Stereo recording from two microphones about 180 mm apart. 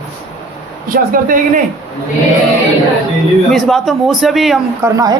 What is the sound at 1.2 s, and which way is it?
Speech, 50° right (ahead or behind).